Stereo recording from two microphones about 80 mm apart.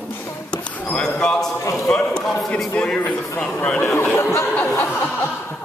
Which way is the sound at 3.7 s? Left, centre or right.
Left.